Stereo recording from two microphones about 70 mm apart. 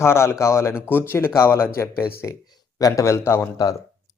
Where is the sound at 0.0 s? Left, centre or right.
Left.